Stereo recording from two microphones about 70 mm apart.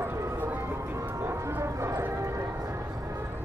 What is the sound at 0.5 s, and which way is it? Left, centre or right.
Music, right.